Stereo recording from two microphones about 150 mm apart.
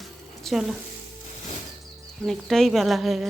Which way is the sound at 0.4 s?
Centre (ahead or behind).